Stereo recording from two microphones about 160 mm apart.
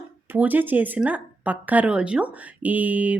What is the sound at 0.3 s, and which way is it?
A woman's voice, 10° right (ahead or behind).